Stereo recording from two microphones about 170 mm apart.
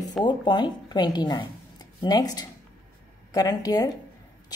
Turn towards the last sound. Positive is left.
turn(degrees=20)  # may be behind; listen again after turning